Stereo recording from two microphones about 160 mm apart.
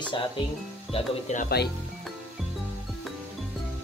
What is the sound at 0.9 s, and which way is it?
Speech, 45° left (ahead or behind).